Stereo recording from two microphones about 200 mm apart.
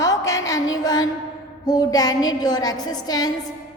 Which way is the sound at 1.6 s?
20° left (ahead or behind).